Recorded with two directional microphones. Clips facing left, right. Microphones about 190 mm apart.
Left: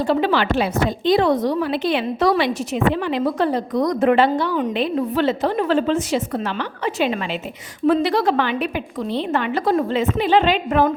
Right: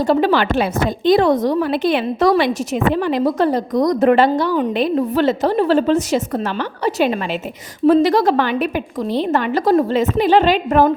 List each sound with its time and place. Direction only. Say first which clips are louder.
0.1 s a woman's voice: right 3 dB; 40° right (ahead or behind)